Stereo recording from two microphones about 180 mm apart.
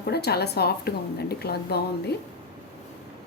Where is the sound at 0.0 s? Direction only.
60° left (ahead or behind).